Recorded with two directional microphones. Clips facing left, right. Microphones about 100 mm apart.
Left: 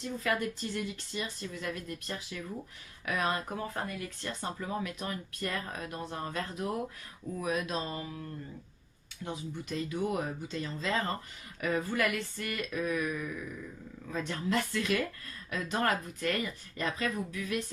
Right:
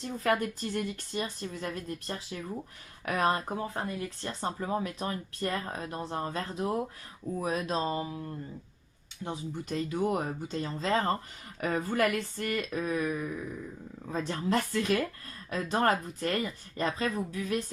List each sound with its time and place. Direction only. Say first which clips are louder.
0.2 s speech: right 5 dB; 40° right (ahead or behind)
3.5 s speech: right 2 dB; 25° right (ahead or behind)
9.2 s speech: right 2 dB; 35° right (ahead or behind)